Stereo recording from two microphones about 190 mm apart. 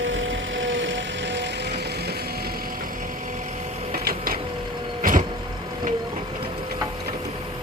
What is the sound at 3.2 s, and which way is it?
Printer, 40° right (ahead or behind).